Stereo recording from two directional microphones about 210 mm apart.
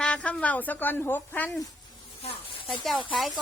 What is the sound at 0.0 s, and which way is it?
Speech, 5° left (ahead or behind).